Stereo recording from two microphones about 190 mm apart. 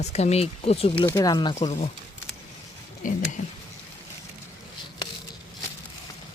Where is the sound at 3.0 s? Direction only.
45° left (ahead or behind).